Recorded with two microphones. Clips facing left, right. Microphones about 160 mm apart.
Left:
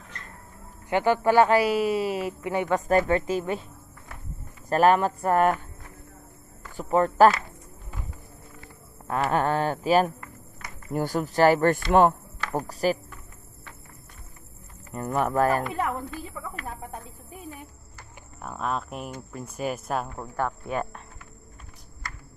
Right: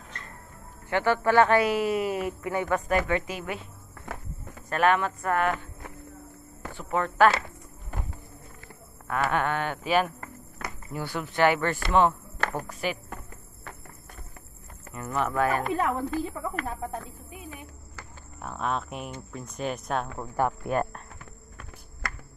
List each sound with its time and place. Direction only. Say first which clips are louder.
0.8 s speech: left 2 dB; 15° left (ahead or behind)
1.9 s speech: left 1 dB; 30° left (ahead or behind)
2.9 s speech: left 4 dB; 35° left (ahead or behind)
4.6 s speech: left 4 dB; 35° left (ahead or behind)
6.7 s speech: left 6 dB; 40° left (ahead or behind)
9.0 s speech: left 2 dB; 30° left (ahead or behind)
15.0 s speech: left 3 dB; 50° left (ahead or behind)
15.6 s a woman's voice: right 2 dB; 45° right (ahead or behind)
18.4 s speech: even; centre (ahead or behind)
20.3 s speech: right 3 dB; 10° right (ahead or behind)
20.7 s speech: right 2 dB; centre (ahead or behind)